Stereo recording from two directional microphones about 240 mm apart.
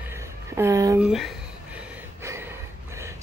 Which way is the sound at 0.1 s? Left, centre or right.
Centre.